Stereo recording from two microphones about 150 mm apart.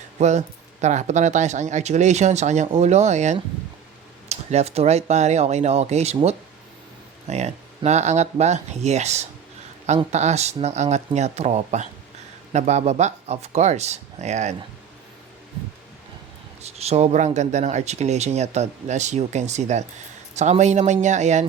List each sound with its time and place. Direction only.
0.2 s speech: 50° right (ahead or behind)
7.3 s speech: 50° right (ahead or behind)
16.6 s speech: 45° right (ahead or behind)